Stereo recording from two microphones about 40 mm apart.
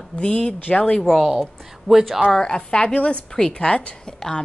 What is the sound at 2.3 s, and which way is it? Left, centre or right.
A woman's voice, left.